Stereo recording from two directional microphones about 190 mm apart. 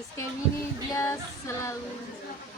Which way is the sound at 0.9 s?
15° left (ahead or behind).